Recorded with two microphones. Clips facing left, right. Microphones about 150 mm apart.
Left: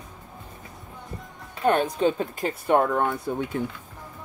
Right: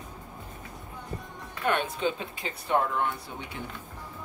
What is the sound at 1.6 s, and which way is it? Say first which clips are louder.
Speech: left 6 dB; 35° left (ahead or behind).